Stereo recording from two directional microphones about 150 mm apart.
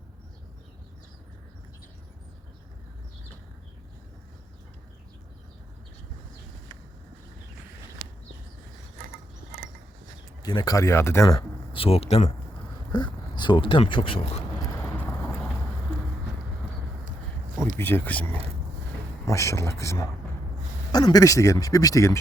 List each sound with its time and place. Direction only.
10.4 s speech: 25° left (ahead or behind); by 12.3 s 45° left (ahead or behind)
12.9 s speech: 30° left (ahead or behind)
14.8 s vehicle: 10° left (ahead or behind)
17.7 s speech: 15° left (ahead or behind)
19.3 s speech: 20° left (ahead or behind)